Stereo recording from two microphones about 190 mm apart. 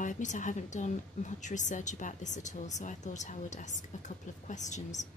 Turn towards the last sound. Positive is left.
turn(degrees=40)  # may be behind; listen again after turning